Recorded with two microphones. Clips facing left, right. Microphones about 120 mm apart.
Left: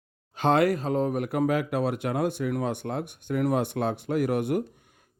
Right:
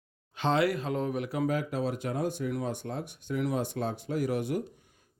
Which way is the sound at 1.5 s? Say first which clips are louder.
Left 4 dB; 70° left (ahead or behind).